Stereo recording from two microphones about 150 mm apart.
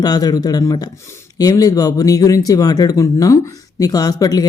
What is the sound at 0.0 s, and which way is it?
Speech, 25° left (ahead or behind).